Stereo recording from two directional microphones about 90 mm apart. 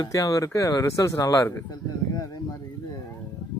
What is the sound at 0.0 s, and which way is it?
Speech, 35° left (ahead or behind).